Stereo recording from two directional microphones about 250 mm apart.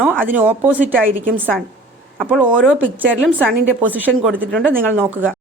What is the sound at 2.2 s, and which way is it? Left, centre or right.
Speech, centre.